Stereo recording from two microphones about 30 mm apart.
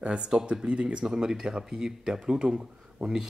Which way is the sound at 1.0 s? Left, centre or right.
Right.